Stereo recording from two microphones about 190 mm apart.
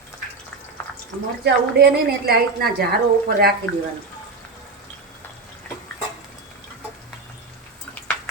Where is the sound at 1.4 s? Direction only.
60° right (ahead or behind).